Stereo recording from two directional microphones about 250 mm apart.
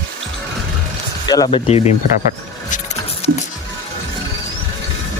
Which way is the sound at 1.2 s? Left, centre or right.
Centre.